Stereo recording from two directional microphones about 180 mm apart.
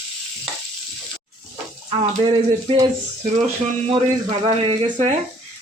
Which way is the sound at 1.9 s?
30° right (ahead or behind).